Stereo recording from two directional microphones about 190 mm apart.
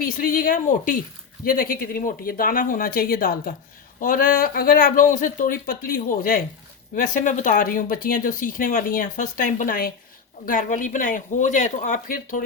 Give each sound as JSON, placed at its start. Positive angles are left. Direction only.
{"t": 0.0, "sound": "speech", "side_deg": 45}